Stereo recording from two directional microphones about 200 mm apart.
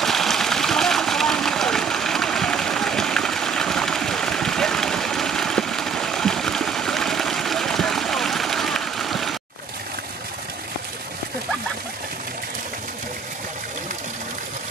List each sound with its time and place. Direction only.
0.0 s vehicle: centre (ahead or behind)